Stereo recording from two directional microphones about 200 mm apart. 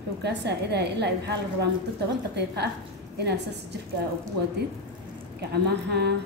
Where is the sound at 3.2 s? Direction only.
55° right (ahead or behind).